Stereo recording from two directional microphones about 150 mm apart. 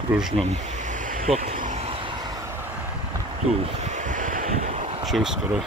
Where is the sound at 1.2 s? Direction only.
45° right (ahead or behind).